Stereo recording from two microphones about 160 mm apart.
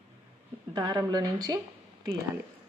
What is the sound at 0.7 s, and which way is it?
Speech, 30° right (ahead or behind).